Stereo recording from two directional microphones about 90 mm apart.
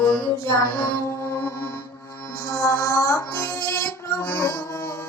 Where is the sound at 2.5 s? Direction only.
30° left (ahead or behind).